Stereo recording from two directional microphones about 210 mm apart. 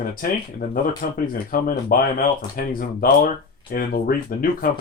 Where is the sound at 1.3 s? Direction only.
40° left (ahead or behind).